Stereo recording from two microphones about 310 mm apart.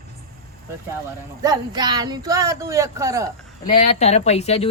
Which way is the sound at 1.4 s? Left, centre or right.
Centre.